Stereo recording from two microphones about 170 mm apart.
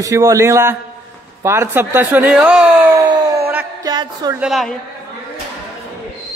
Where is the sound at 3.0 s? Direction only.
20° right (ahead or behind).